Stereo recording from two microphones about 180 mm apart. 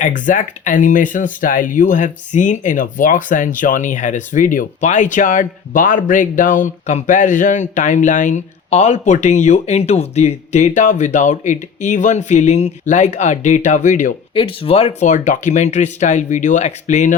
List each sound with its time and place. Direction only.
0.0 s speech: 45° left (ahead or behind)
14.3 s speech: 30° left (ahead or behind)